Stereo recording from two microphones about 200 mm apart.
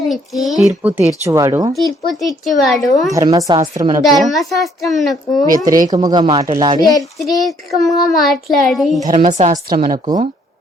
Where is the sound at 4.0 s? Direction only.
Centre (ahead or behind).